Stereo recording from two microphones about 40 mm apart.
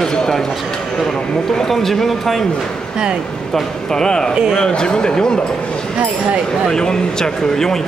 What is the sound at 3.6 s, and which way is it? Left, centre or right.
Speech, centre.